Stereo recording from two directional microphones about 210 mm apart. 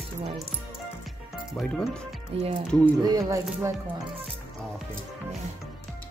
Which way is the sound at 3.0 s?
15° right (ahead or behind).